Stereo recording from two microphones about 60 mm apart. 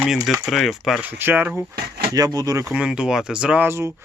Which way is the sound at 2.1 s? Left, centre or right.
Right.